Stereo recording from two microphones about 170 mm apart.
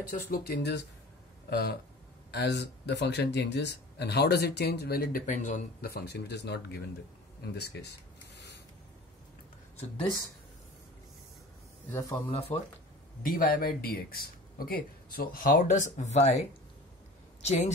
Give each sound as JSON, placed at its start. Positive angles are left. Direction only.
{"t": 0.1, "sound": "speech", "side_deg": 60}
{"t": 1.5, "sound": "speech", "side_deg": 70}
{"t": 2.3, "sound": "speech", "side_deg": 85}
{"t": 5.8, "sound": "speech", "side_deg": 70}
{"t": 7.5, "sound": "a sound", "side_deg": 75}
{"t": 9.8, "sound": "speech", "side_deg": 30}
{"t": 11.9, "sound": "speech", "side_deg": 20}
{"t": 12.3, "sound": "speech", "side_deg": 35}
{"t": 13.2, "sound": "speech", "side_deg": 55}